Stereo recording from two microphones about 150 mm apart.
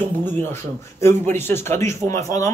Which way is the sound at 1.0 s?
15° left (ahead or behind).